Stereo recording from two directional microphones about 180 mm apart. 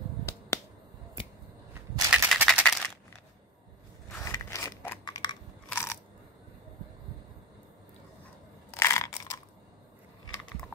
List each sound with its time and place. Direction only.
0.2 s finger snapping: 15° left (ahead or behind)
1.7 s crushing: 15° right (ahead or behind)
2.3 s music: 10° right (ahead or behind)
4.2 s scissors: 15° left (ahead or behind)
5.7 s a sound: 15° left (ahead or behind)
8.7 s crushing: 15° left (ahead or behind)